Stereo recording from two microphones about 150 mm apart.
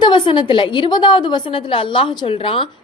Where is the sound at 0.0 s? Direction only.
30° left (ahead or behind).